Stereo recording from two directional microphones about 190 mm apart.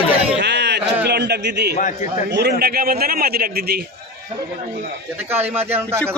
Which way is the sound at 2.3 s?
60° right (ahead or behind).